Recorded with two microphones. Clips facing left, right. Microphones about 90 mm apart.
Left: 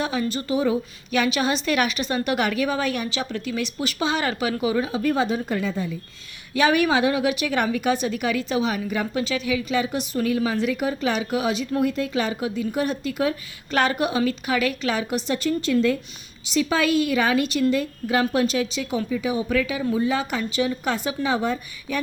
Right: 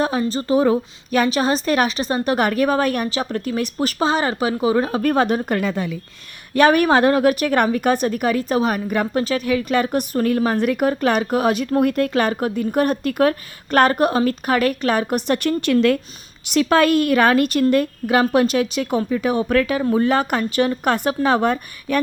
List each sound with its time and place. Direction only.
0.0 s a woman's voice: 40° right (ahead or behind)
4.9 s a woman's voice: 55° right (ahead or behind); by 6.0 s 75° right (ahead or behind)
6.5 s a woman's voice: 50° right (ahead or behind)